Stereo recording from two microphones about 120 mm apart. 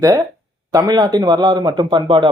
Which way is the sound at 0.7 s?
35° right (ahead or behind).